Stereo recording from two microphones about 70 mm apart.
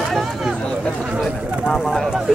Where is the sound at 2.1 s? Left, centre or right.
Centre.